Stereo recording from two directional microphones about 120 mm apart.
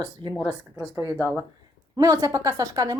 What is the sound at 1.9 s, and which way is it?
A woman's voice, 30° right (ahead or behind).